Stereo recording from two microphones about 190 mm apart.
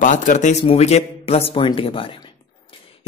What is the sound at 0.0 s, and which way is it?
A man's voice, 40° left (ahead or behind).